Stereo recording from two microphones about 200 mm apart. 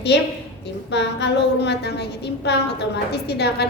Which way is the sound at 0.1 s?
55° left (ahead or behind).